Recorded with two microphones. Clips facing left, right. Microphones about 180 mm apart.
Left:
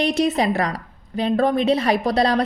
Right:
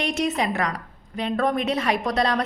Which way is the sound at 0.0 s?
35° left (ahead or behind).